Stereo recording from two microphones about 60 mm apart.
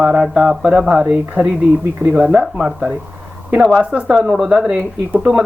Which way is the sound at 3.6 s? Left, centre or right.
Centre.